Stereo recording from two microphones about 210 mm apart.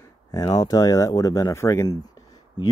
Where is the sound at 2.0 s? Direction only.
20° left (ahead or behind).